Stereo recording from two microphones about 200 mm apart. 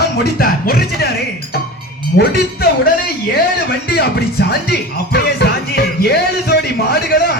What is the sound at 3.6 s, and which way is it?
Speech, 50° left (ahead or behind).